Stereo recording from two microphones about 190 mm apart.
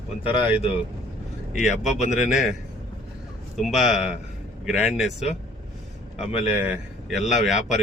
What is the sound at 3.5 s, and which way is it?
A man's voice, centre (ahead or behind).